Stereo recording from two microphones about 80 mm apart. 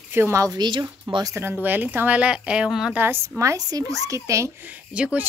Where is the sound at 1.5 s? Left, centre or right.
Right.